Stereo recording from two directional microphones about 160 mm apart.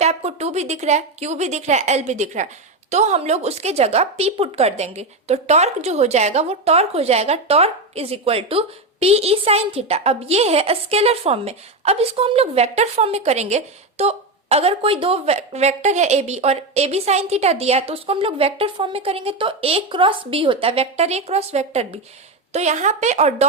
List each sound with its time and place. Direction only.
0.0 s a woman's voice: 40° right (ahead or behind)